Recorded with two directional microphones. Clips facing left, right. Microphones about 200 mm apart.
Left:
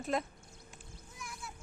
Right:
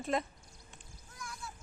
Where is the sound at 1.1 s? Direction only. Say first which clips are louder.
Right 1 dB; 20° left (ahead or behind).